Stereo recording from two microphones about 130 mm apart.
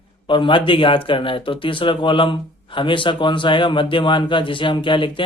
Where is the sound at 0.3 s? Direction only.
40° left (ahead or behind).